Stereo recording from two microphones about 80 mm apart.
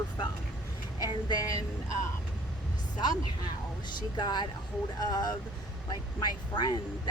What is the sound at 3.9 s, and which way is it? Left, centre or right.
Speech, left.